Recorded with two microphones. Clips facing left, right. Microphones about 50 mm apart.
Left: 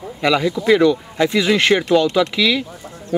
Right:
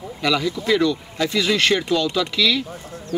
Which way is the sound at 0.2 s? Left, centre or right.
Left.